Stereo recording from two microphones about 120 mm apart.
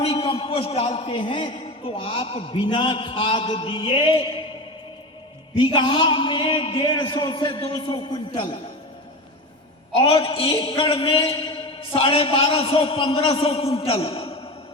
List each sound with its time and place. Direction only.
0.0 s a man's voice: 50° left (ahead or behind)
5.5 s a man's voice: 45° left (ahead or behind)
9.9 s a man's voice: 50° left (ahead or behind)